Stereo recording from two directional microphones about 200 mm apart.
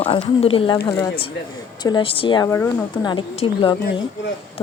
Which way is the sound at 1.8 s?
25° left (ahead or behind).